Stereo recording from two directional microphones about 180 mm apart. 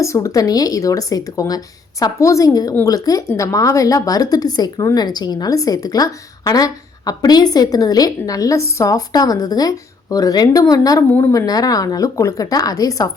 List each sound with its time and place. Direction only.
0.0 s speech: 15° left (ahead or behind)